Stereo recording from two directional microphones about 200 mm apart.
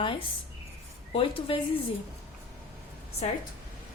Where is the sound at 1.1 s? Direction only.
25° left (ahead or behind).